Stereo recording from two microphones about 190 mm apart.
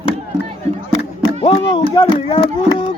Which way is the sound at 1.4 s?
25° left (ahead or behind).